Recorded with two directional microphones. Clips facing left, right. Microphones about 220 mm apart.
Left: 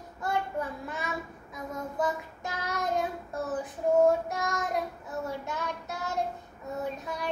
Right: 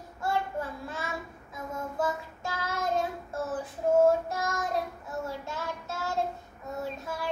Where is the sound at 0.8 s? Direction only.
15° left (ahead or behind).